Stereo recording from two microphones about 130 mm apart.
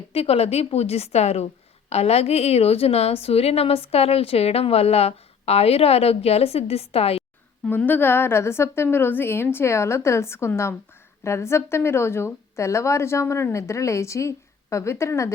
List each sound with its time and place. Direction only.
0.1 s a woman's voice: 50° left (ahead or behind)
7.7 s a woman's voice: 15° left (ahead or behind)